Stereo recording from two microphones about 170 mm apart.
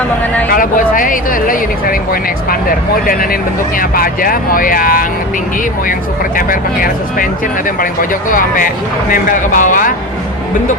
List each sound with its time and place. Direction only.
0.5 s speech: 55° left (ahead or behind)
6.3 s speech: 55° left (ahead or behind)
8.3 s speech: 55° left (ahead or behind)